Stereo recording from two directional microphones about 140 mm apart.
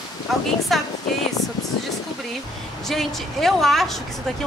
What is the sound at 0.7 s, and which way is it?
Speech, centre (ahead or behind).